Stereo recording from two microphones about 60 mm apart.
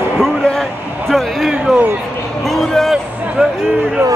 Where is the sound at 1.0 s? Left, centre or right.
Centre.